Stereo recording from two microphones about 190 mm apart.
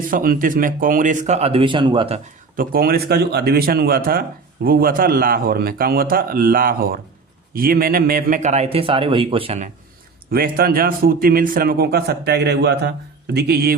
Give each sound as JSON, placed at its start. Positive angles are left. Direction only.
{"t": 0.1, "sound": "a man's voice", "side_deg": -50}
{"t": 2.6, "sound": "a man's voice", "side_deg": -50}
{"t": 10.3, "sound": "a man's voice", "side_deg": -50}